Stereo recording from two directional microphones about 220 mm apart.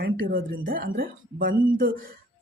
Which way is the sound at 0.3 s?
40° right (ahead or behind).